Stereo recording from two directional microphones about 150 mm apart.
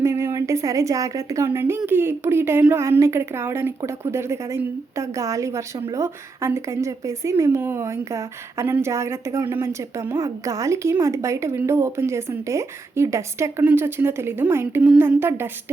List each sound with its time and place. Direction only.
0.0 s a woman's voice: 20° right (ahead or behind)